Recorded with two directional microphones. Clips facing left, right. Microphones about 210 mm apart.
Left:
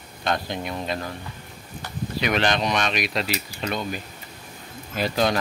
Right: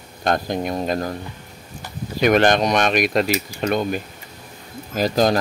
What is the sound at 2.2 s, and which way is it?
Cutlery, 50° right (ahead or behind).